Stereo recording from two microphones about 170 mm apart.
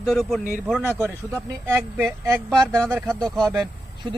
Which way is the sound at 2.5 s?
5° left (ahead or behind).